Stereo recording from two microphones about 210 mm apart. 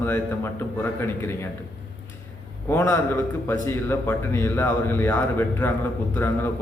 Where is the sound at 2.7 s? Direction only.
10° left (ahead or behind).